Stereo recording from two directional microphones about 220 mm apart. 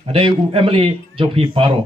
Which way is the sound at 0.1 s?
25° right (ahead or behind).